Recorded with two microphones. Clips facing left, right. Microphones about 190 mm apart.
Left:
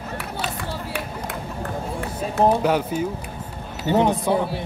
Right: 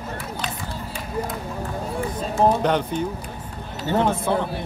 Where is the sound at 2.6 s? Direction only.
5° left (ahead or behind).